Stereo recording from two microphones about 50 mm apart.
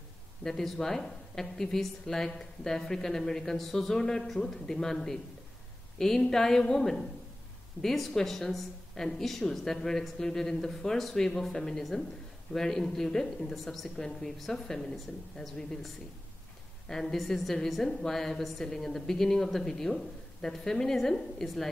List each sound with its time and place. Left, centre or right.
0.4 s a woman's voice: centre
16.9 s a woman's voice: centre